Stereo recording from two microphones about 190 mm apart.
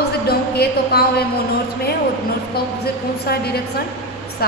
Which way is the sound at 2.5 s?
55° left (ahead or behind).